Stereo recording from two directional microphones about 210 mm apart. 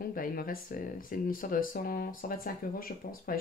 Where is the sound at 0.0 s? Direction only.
45° left (ahead or behind).